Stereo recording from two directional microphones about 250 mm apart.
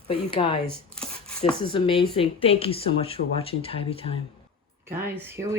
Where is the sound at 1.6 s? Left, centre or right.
Left.